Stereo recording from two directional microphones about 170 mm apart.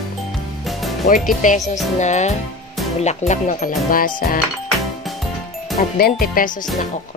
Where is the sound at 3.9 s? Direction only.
55° left (ahead or behind).